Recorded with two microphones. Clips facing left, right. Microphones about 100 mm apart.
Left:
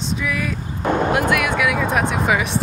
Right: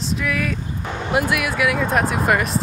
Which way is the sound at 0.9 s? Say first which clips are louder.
Left 10 dB; 50° left (ahead or behind).